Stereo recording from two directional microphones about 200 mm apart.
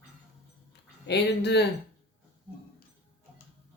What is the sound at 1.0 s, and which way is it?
Speech, 60° left (ahead or behind).